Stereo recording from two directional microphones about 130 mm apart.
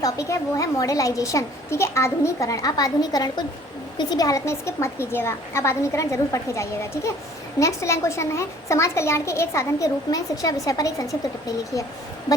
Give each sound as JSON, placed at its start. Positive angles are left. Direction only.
{"t": 0.0, "sound": "a child's voice", "side_deg": 25}